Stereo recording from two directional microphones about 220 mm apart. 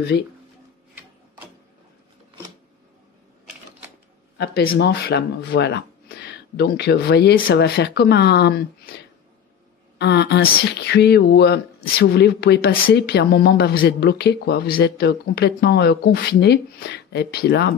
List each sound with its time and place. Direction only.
0.1 s speech: 50° left (ahead or behind)
4.4 s speech: 50° left (ahead or behind)